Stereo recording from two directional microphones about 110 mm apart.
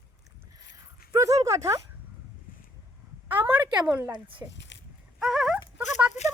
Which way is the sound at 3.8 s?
15° right (ahead or behind).